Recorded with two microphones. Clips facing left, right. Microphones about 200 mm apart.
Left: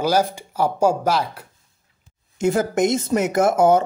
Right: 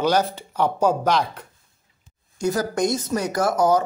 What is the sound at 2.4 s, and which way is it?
Speech, 25° left (ahead or behind).